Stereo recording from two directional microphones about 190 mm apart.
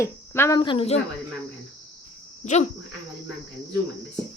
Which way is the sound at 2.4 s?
40° left (ahead or behind).